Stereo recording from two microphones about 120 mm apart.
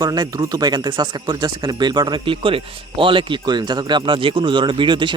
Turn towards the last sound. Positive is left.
turn(degrees=-40)  # may be behind; listen again after turning